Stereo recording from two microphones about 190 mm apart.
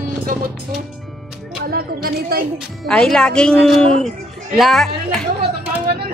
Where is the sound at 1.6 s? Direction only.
55° right (ahead or behind).